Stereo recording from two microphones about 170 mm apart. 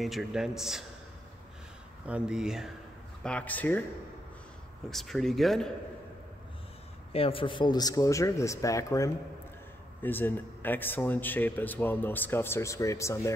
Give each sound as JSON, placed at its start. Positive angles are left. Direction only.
{"t": 0.0, "sound": "a man's voice", "side_deg": 0}
{"t": 2.0, "sound": "a man's voice", "side_deg": -5}
{"t": 3.3, "sound": "speech", "side_deg": 10}
{"t": 4.9, "sound": "a man's voice", "side_deg": 0}
{"t": 7.1, "sound": "a man's voice", "side_deg": 35}